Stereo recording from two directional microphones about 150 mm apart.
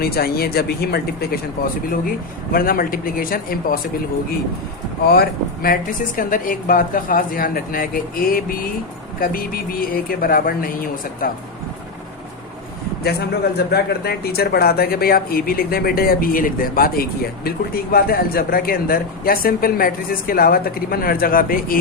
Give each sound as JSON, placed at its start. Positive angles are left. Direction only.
{"t": 0.0, "sound": "speech", "side_deg": 90}
{"t": 2.5, "sound": "speech", "side_deg": 75}
{"t": 5.0, "sound": "speech", "side_deg": 90}
{"t": 6.1, "sound": "speech", "side_deg": 65}
{"t": 13.1, "sound": "speech", "side_deg": 90}